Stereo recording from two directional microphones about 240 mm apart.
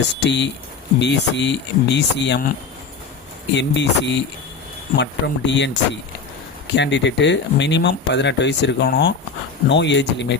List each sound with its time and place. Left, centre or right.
0.2 s speech: left
3.5 s speech: left